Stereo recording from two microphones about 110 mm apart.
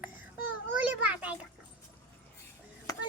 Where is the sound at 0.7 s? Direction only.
15° right (ahead or behind).